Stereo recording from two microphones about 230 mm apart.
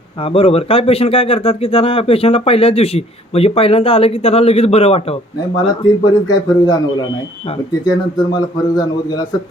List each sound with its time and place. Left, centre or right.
0.2 s a man's voice: left